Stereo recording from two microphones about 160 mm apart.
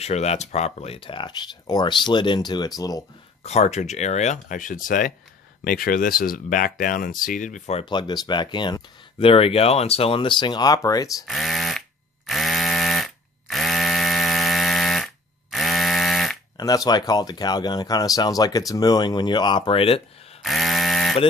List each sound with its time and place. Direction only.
0.0 s speech: 45° left (ahead or behind); by 3.0 s 25° left (ahead or behind)
3.4 s speech: 45° left (ahead or behind)
7.8 s speech: 30° left (ahead or behind)
11.2 s a sound: centre (ahead or behind)
12.3 s electric toothbrush: centre (ahead or behind)
15.5 s a sound: centre (ahead or behind)
16.5 s speech: 25° left (ahead or behind)
20.4 s toothbrush: centre (ahead or behind)